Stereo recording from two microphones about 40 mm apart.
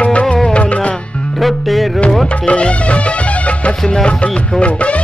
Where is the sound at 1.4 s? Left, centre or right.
Centre.